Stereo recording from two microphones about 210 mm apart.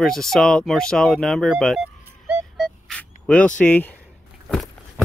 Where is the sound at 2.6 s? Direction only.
5° left (ahead or behind).